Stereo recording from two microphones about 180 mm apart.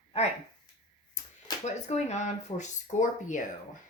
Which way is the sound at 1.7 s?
40° left (ahead or behind).